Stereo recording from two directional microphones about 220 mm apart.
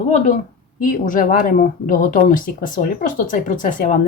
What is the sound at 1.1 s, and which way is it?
Speech, 35° left (ahead or behind).